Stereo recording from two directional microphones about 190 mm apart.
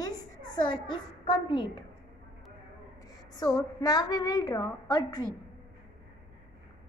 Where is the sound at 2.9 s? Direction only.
20° left (ahead or behind).